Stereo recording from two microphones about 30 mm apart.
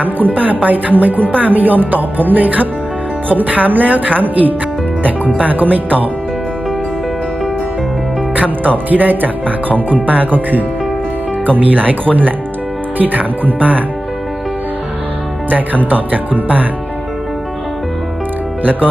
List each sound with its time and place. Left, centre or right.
0.0 s speech: right
8.9 s speech: right
15.4 s speech: right
18.6 s speech: right